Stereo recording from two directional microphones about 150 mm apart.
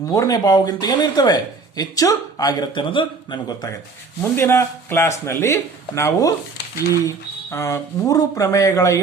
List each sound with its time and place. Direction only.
0.1 s speech: 25° left (ahead or behind)
4.2 s speech: 15° left (ahead or behind)
7.5 s speech: 20° left (ahead or behind)